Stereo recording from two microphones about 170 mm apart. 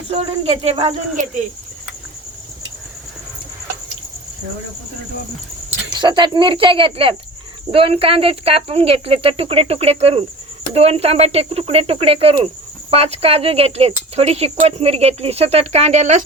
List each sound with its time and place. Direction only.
0.1 s speech: 35° right (ahead or behind)
5.9 s speech: 25° right (ahead or behind); by 16.2 s 45° right (ahead or behind)